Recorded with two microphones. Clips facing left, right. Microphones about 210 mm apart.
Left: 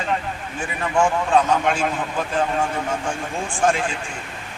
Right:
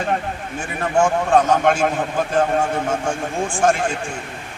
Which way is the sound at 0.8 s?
45° right (ahead or behind).